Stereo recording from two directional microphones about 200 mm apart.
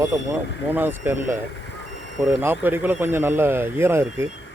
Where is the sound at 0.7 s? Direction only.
10° right (ahead or behind).